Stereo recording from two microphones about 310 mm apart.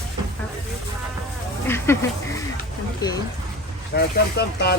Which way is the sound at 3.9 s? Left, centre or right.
Left.